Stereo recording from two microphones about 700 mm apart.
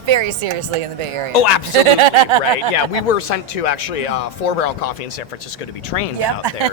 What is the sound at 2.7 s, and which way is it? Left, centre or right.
Speech, left.